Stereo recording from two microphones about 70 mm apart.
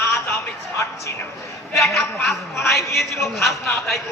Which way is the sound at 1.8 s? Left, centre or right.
Centre.